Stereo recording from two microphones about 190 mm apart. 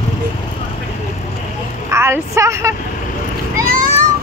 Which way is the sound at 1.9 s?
15° right (ahead or behind).